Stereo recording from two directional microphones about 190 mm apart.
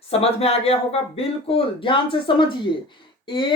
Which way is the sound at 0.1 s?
30° left (ahead or behind).